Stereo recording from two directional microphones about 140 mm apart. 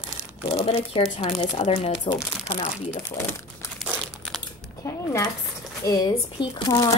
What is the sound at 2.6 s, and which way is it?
Speech, 40° left (ahead or behind).